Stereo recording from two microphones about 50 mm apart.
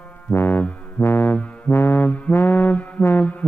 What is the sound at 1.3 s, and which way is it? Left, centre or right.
Music, left.